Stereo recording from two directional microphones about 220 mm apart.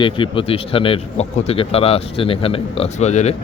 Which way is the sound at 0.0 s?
25° left (ahead or behind).